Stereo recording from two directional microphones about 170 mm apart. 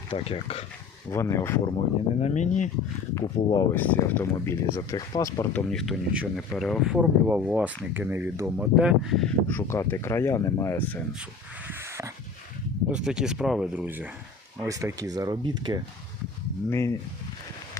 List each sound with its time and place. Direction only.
0.1 s speech: 35° left (ahead or behind)
1.1 s speech: 15° left (ahead or behind)
2.2 s speech: 45° left (ahead or behind)
3.2 s speech: 15° left (ahead or behind)
5.7 s speech: centre (ahead or behind)
9.5 s speech: 15° left (ahead or behind)
11.7 s dog: 15° right (ahead or behind)
12.9 s speech: 5° right (ahead or behind); by 15.8 s 25° right (ahead or behind)
16.6 s speech: 15° left (ahead or behind)